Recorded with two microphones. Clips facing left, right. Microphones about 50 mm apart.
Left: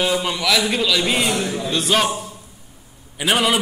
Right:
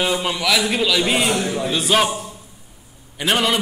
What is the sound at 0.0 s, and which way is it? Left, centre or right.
A man's voice, centre.